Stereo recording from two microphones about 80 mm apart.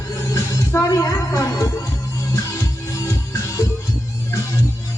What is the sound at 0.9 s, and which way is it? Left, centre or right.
Speech, left.